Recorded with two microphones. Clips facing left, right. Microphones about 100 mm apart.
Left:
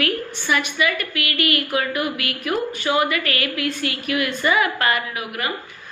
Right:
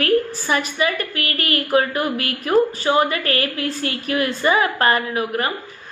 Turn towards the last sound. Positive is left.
turn(degrees=-35)  # may be behind; listen again after turning